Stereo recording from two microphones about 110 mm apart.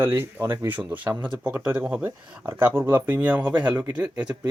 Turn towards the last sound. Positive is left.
turn(degrees=-10)  # may be behind; listen again after turning